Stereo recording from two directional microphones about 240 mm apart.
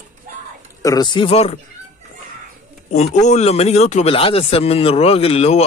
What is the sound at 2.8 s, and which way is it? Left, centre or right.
Speech, left.